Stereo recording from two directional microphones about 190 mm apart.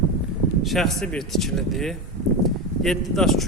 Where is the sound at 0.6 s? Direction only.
Centre (ahead or behind).